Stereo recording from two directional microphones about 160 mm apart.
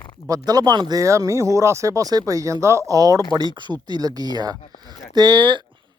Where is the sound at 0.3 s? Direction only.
25° right (ahead or behind).